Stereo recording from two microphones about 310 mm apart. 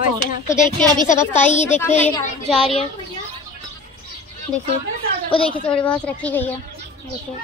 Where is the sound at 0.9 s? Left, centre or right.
Left.